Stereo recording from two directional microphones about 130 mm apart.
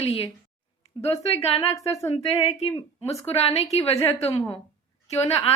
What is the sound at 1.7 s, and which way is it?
Speech, 25° left (ahead or behind).